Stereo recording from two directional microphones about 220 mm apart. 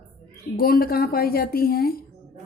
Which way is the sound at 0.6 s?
45° left (ahead or behind).